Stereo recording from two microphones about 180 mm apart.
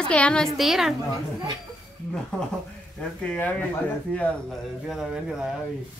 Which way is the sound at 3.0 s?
5° left (ahead or behind).